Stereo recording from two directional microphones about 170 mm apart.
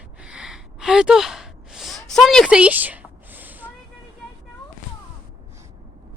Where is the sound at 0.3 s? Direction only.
5° right (ahead or behind).